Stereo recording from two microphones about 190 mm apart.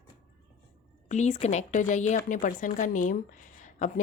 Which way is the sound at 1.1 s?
35° left (ahead or behind).